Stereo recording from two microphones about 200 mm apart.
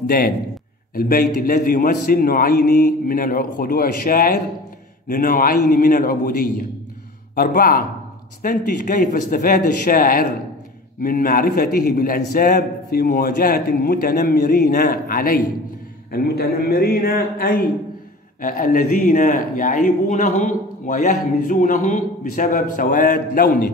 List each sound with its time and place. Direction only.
0.0 s a man's voice: 45° left (ahead or behind)